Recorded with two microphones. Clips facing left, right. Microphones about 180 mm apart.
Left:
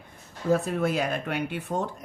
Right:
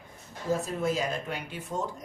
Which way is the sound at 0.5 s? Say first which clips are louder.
Left 4 dB; 60° left (ahead or behind).